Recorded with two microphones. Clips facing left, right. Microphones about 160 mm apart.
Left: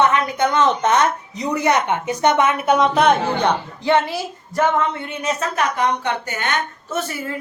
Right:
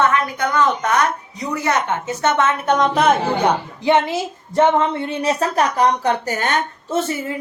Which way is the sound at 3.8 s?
20° right (ahead or behind).